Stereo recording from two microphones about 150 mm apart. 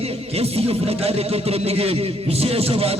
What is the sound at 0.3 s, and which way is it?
Music, 40° right (ahead or behind).